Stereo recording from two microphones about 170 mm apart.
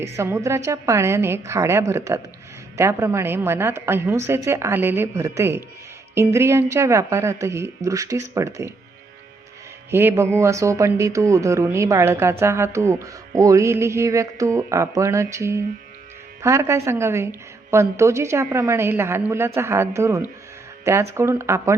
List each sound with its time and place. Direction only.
0.0 s speech: 15° right (ahead or behind)
9.9 s speech: 15° right (ahead or behind)